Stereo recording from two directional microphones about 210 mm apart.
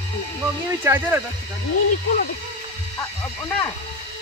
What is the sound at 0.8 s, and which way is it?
Speech, 10° right (ahead or behind).